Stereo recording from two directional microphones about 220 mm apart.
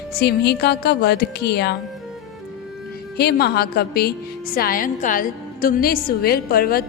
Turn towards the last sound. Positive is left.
turn(degrees=45)  # may be behind; listen again after turning